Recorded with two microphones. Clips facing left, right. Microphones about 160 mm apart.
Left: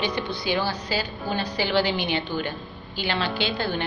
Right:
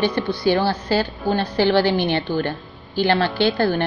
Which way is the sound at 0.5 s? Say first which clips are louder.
Right 7 dB; 50° right (ahead or behind).